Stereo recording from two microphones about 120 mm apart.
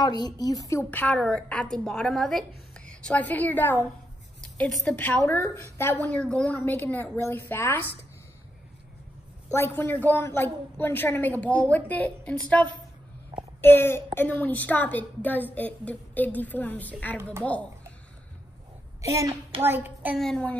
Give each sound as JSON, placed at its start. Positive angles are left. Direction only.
{"t": 0.0, "sound": "a woman's voice", "side_deg": 35}
{"t": 0.8, "sound": "a woman's voice", "side_deg": 10}
{"t": 4.6, "sound": "a woman's voice", "side_deg": 5}
{"t": 4.9, "sound": "a woman's voice", "side_deg": 15}
{"t": 9.5, "sound": "a woman's voice", "side_deg": 20}
{"t": 18.9, "sound": "speech", "side_deg": -25}
{"t": 19.6, "sound": "child singing", "side_deg": -15}
{"t": 20.2, "sound": "a woman's voice", "side_deg": 5}